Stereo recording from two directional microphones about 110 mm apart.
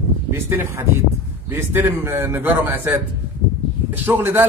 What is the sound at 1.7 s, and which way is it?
A man's voice, 20° right (ahead or behind).